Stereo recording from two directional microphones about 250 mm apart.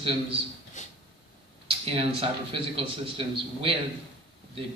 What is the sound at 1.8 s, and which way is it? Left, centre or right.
Speech, right.